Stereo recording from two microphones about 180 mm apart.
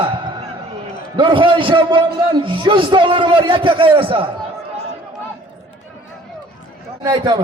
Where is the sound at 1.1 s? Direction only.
30° right (ahead or behind).